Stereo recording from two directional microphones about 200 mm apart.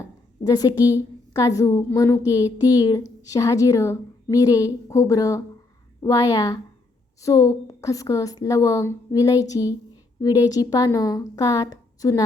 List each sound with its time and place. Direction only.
0.0 s a woman's voice: 20° left (ahead or behind)